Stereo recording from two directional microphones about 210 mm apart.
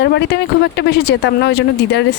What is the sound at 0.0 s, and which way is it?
Speech, 55° left (ahead or behind).